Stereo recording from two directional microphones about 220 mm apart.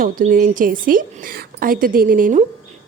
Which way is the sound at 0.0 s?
40° right (ahead or behind).